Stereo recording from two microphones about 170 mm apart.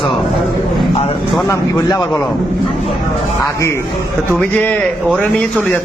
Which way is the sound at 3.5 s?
15° left (ahead or behind).